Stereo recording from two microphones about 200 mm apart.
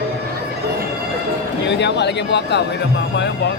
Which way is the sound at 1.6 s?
60° left (ahead or behind).